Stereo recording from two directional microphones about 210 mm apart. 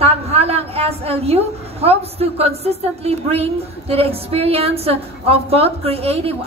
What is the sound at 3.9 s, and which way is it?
A woman's voice, 30° right (ahead or behind).